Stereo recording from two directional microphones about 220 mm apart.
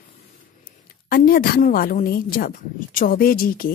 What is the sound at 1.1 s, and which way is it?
A woman's voice, 40° left (ahead or behind).